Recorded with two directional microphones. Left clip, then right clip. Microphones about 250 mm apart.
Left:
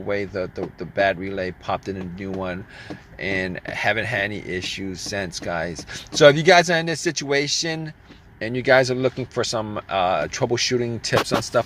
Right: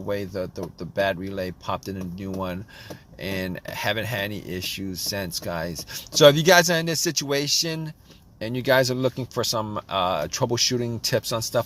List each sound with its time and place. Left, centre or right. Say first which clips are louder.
0.0 s speech: left 3 dB; right